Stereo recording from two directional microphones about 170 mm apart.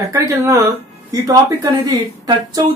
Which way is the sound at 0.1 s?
20° right (ahead or behind).